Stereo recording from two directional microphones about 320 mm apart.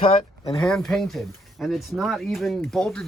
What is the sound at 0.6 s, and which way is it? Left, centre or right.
Speech, centre.